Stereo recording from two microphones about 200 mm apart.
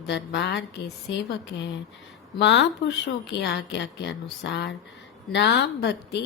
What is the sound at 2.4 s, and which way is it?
Speech, 60° left (ahead or behind).